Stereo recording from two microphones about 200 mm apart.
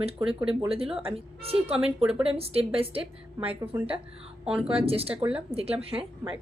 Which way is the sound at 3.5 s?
10° right (ahead or behind).